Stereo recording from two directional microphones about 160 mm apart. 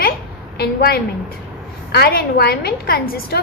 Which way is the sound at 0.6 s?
75° left (ahead or behind).